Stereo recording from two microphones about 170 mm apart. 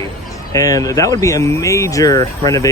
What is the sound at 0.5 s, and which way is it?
Speech, 20° left (ahead or behind).